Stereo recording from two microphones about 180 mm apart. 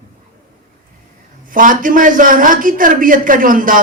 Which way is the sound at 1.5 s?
50° right (ahead or behind).